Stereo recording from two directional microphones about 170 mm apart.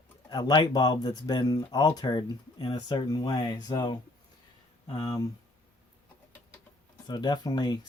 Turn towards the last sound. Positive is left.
turn(degrees=25)  # may be behind; listen again after turning